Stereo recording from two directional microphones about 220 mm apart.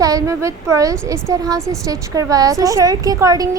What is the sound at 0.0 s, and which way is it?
Speech, 15° right (ahead or behind).